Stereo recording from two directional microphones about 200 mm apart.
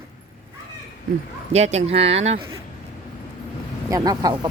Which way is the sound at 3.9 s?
20° right (ahead or behind).